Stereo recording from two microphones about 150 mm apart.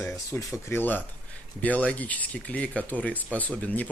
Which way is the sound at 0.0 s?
20° left (ahead or behind).